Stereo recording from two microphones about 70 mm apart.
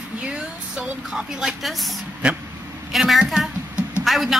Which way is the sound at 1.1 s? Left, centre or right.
Centre.